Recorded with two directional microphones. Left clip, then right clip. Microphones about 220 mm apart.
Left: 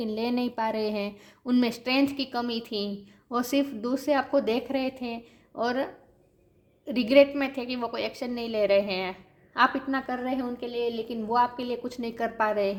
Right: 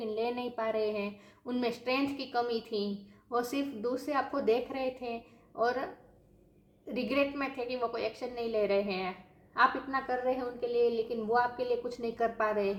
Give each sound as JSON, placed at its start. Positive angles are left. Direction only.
{"t": 0.0, "sound": "a woman's voice", "side_deg": 45}